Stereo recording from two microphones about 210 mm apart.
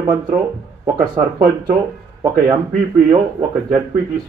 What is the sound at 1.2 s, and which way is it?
Speech, 35° right (ahead or behind).